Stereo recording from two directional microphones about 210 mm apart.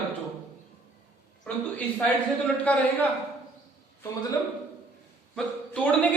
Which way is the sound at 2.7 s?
10° left (ahead or behind).